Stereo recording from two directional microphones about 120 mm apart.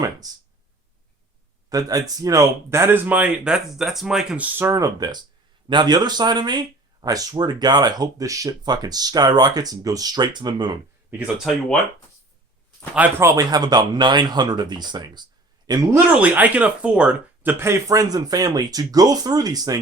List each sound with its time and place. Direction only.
0.2 s speech: 30° right (ahead or behind)
1.7 s speech: 30° right (ahead or behind); by 4.4 s 5° right (ahead or behind)
4.5 s speech: 20° right (ahead or behind)
13.1 s speech: 30° right (ahead or behind)
15.9 s speech: 15° right (ahead or behind); by 19.8 s 30° right (ahead or behind)